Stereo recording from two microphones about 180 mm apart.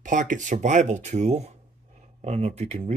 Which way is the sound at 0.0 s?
45° right (ahead or behind).